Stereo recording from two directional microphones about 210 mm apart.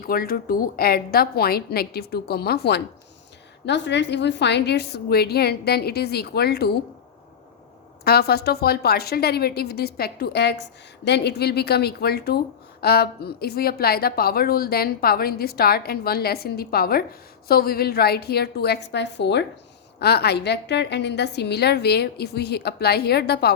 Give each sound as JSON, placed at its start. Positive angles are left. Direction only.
{"t": 0.0, "sound": "a woman's voice", "side_deg": 45}
{"t": 8.0, "sound": "a woman's voice", "side_deg": 50}